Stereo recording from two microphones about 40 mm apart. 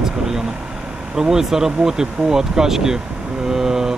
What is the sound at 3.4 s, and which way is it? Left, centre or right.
Vehicle, centre.